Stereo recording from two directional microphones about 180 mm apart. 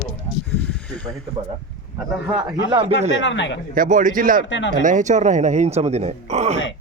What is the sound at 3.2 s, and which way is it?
Speech, 90° left.